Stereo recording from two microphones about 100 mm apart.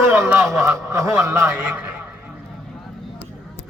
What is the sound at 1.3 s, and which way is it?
Speech, 15° right (ahead or behind).